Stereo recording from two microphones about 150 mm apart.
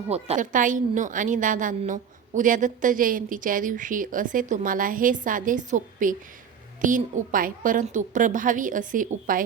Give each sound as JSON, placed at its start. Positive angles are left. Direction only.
{"t": 0.1, "sound": "a woman's voice", "side_deg": -45}
{"t": 0.5, "sound": "a woman's voice", "side_deg": -60}